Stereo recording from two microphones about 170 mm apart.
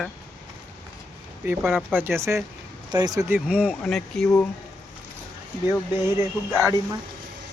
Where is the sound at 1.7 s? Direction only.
10° right (ahead or behind).